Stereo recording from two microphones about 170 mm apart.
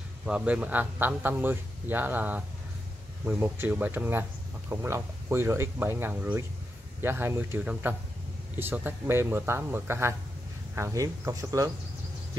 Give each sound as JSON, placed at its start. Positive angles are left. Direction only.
{"t": 0.2, "sound": "speech", "side_deg": -5}